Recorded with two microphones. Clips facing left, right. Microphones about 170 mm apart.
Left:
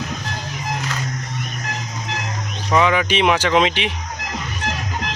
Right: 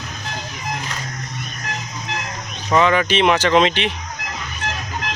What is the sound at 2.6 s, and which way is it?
Speech, 5° left (ahead or behind).